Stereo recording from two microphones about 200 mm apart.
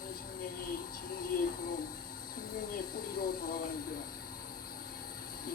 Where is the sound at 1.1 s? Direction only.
45° left (ahead or behind).